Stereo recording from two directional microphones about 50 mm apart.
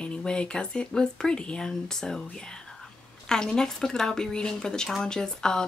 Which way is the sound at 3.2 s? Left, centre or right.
Centre.